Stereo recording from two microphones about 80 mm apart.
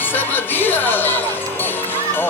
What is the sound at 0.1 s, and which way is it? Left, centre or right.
Music, left.